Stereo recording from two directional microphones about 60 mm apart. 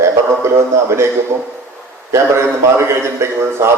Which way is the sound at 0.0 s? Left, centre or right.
Right.